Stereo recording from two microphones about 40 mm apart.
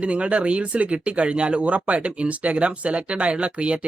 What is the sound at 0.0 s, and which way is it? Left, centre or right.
Speech, right.